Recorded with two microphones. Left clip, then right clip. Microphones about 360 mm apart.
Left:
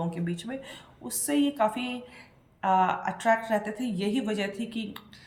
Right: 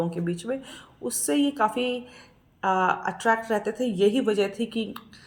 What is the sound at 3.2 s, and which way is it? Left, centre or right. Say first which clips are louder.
Speech: even; left.